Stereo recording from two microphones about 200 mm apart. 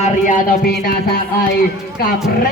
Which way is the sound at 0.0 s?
40° left (ahead or behind).